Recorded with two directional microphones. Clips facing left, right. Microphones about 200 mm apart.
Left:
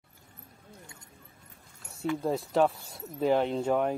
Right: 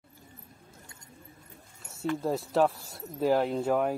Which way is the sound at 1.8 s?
Centre (ahead or behind).